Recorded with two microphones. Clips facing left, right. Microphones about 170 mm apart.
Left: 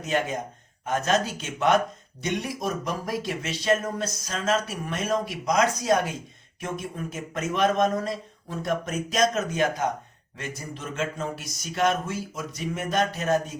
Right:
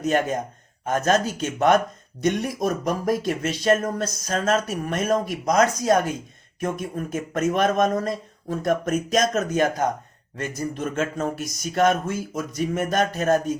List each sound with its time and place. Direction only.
0.0 s speech: 45° right (ahead or behind)